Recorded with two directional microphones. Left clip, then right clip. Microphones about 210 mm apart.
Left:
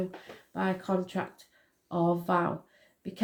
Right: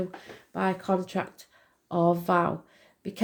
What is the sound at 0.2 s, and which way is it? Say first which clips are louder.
Speech: right 4 dB; 40° right (ahead or behind).